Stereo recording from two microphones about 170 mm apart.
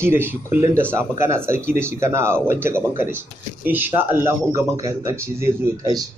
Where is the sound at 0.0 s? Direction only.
15° right (ahead or behind).